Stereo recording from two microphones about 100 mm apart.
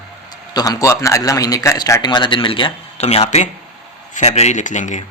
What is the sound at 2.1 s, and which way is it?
A man's voice, 55° left (ahead or behind).